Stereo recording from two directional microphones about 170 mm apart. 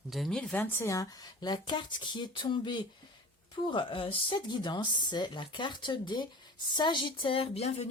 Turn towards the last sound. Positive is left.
turn(degrees=35)  # may be behind; listen again after turning